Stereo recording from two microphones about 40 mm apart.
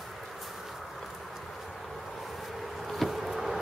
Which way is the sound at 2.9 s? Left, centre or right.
Centre.